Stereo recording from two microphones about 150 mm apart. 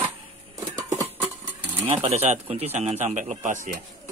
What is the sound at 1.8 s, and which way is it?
Speech, 35° right (ahead or behind).